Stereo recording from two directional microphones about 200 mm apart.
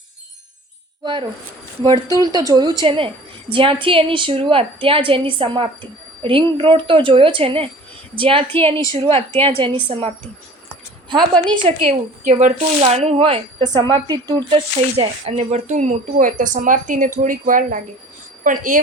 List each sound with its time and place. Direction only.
2.2 s a woman's voice: 20° right (ahead or behind)
8.5 s a woman's voice: 10° left (ahead or behind)
8.9 s a woman's voice: 30° right (ahead or behind)
11.5 s a woman's voice: 25° right (ahead or behind)
12.2 s speech: 40° right (ahead or behind)